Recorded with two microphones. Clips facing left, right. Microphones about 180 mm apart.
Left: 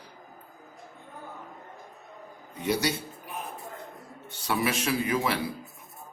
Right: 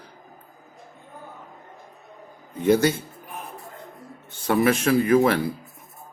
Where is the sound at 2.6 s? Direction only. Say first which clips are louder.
Right 9 dB; 50° right (ahead or behind).